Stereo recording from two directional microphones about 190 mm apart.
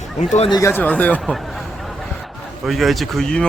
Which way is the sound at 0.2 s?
35° left (ahead or behind).